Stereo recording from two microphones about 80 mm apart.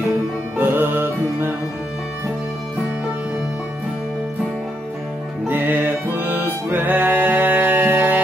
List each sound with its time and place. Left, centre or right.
0.6 s music: right
5.5 s music: right